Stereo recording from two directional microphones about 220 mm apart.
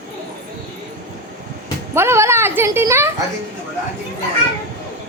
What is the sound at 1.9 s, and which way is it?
Speech, 10° right (ahead or behind).